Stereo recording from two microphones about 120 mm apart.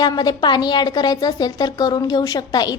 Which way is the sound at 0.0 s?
35° left (ahead or behind).